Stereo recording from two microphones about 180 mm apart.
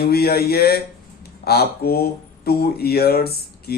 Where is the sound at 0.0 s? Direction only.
60° left (ahead or behind).